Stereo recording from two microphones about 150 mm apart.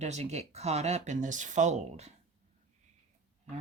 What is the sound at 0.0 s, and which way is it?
Speech, 50° right (ahead or behind).